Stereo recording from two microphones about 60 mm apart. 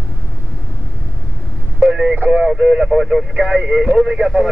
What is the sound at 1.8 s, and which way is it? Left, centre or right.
Radio, centre.